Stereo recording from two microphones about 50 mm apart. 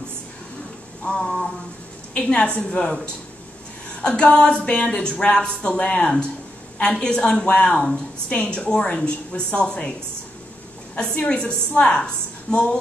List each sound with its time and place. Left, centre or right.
1.1 s a sound: centre
2.1 s speech: centre
4.0 s a woman's voice: left
11.1 s a woman's voice: left